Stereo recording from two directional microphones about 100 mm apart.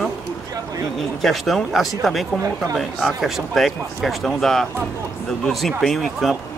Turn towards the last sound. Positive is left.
turn(degrees=0)  # may be behind; listen again after turning